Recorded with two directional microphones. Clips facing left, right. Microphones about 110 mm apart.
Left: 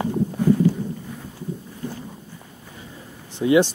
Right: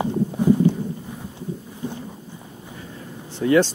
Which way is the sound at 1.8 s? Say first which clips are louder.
Right 2 dB; 20° right (ahead or behind).